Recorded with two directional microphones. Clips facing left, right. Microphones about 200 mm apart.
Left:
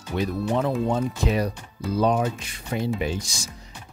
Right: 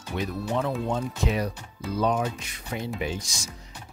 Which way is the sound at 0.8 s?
40° left (ahead or behind).